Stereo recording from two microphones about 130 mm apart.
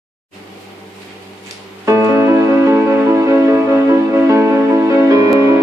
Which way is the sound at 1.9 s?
20° right (ahead or behind).